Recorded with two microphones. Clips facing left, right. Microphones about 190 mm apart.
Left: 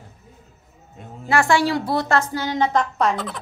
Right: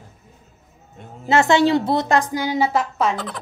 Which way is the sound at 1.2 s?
20° right (ahead or behind).